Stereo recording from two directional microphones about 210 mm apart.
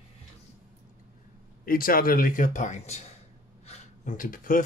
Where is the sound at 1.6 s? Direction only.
45° left (ahead or behind).